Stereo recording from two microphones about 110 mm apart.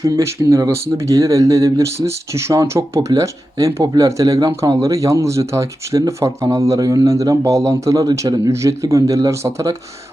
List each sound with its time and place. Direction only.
0.0 s speech: 30° right (ahead or behind)